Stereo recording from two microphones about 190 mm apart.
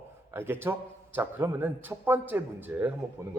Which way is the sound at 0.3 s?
10° right (ahead or behind).